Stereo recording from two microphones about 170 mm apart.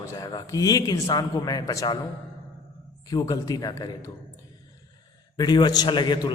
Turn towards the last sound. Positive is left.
turn(degrees=25)  # may be behind; listen again after turning